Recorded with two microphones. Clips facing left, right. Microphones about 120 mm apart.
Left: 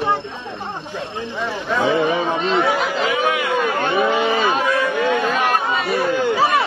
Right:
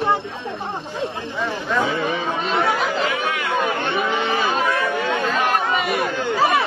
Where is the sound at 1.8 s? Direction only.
25° left (ahead or behind).